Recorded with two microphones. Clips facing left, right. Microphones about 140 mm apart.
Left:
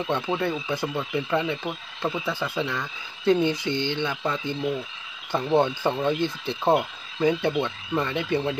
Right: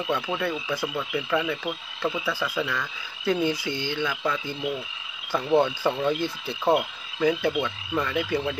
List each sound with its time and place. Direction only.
0.0 s speech: 25° left (ahead or behind)
6.8 s frog: 25° left (ahead or behind)
7.6 s speech: 25° left (ahead or behind)